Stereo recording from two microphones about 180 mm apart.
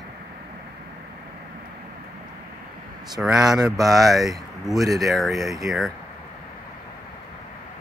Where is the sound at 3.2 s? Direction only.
5° right (ahead or behind).